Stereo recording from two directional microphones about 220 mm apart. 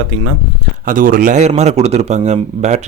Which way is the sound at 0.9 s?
40° right (ahead or behind).